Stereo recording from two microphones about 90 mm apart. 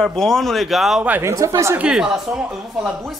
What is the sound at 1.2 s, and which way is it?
Speech, 35° right (ahead or behind).